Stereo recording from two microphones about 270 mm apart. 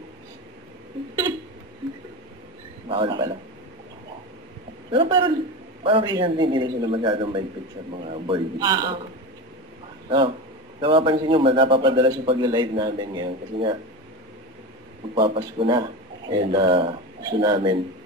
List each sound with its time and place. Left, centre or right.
2.9 s a man's voice: centre
4.9 s a man's voice: centre
10.0 s a man's voice: centre
15.1 s a man's voice: centre